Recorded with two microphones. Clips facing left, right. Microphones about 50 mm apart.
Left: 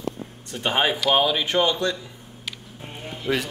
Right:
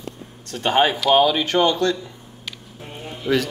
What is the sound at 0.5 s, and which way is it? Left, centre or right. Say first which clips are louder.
A man's voice: right 4 dB; centre.